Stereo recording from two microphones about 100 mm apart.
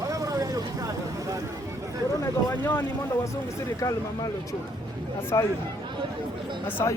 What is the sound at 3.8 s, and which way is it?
Speech, 35° left (ahead or behind).